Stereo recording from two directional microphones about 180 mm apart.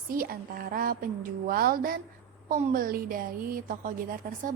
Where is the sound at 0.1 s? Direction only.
55° right (ahead or behind).